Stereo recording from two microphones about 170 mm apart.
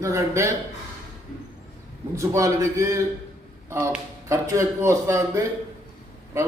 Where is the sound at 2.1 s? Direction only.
20° right (ahead or behind).